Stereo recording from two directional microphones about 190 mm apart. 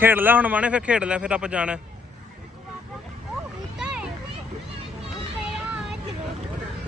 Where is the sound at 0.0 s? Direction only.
10° right (ahead or behind).